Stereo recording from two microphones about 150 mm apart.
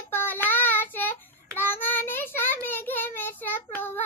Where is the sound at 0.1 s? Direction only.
15° left (ahead or behind).